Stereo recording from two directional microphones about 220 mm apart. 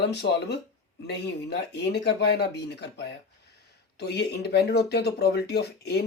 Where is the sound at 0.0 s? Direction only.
50° left (ahead or behind).